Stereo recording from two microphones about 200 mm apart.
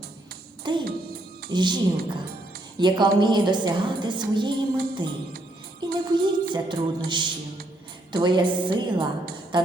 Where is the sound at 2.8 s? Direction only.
20° right (ahead or behind).